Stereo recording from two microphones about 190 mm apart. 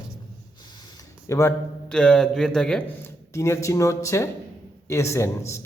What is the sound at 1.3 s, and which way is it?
Speech, 15° left (ahead or behind).